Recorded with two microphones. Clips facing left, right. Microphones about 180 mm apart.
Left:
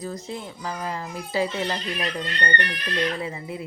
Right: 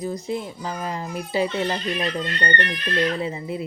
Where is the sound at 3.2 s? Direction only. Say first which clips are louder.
Right 4 dB; 25° right (ahead or behind).